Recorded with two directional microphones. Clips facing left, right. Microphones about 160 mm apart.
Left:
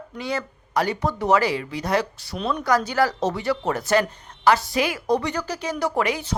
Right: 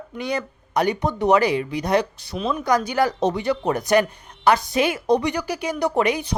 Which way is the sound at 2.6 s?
15° right (ahead or behind).